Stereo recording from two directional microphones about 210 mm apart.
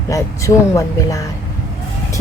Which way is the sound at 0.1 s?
15° left (ahead or behind).